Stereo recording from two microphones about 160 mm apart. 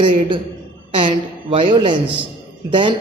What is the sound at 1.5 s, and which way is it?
A woman's voice, 30° right (ahead or behind).